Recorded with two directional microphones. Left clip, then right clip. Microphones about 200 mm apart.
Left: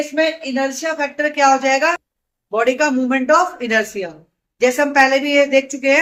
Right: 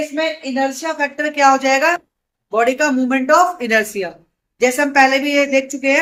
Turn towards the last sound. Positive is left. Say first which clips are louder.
# left 1 dB
turn(degrees=-15)  # may be behind; listen again after turning